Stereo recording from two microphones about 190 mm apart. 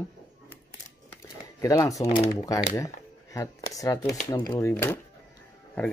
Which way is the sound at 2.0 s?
30° left (ahead or behind).